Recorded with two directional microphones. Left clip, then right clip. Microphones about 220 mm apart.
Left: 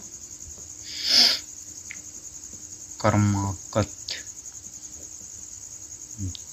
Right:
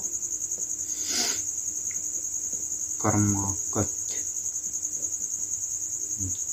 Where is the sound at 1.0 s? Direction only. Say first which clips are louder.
Left 11 dB; 40° left (ahead or behind).